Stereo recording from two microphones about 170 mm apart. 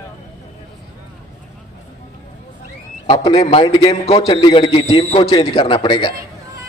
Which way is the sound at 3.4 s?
35° left (ahead or behind).